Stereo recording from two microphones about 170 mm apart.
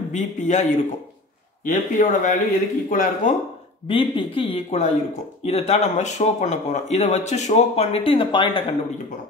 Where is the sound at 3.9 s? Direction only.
30° left (ahead or behind).